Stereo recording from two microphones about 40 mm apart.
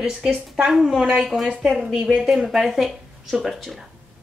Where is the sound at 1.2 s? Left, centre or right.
Centre.